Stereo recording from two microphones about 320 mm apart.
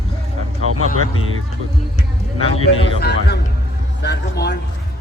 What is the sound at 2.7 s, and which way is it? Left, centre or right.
Speech, left.